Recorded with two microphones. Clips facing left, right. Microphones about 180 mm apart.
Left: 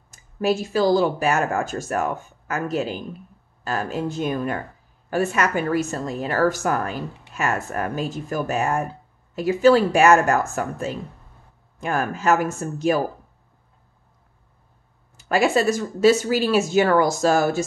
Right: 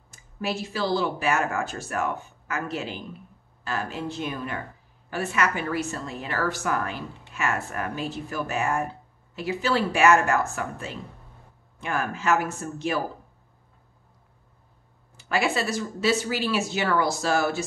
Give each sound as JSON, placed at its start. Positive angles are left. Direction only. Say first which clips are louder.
{"t": 0.1, "sound": "a woman's voice", "louder": "left 8 dB", "side_deg": 45}
{"t": 15.1, "sound": "a woman's voice", "louder": "left 6 dB", "side_deg": 45}